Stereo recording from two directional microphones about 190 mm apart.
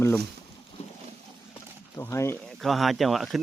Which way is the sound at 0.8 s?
35° left (ahead or behind).